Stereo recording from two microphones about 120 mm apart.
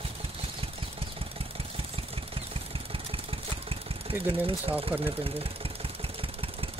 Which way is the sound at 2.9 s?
50° right (ahead or behind).